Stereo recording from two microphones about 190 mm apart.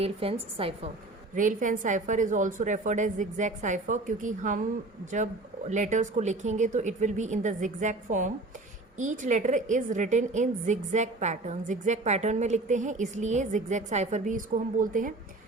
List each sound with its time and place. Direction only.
0.0 s a woman's voice: 30° right (ahead or behind)
1.4 s a woman's voice: 45° right (ahead or behind)